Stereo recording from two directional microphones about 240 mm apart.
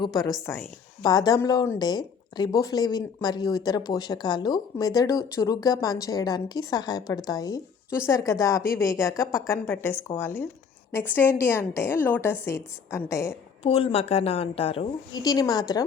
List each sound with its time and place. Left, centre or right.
0.0 s speech: centre
13.6 s a woman's voice: left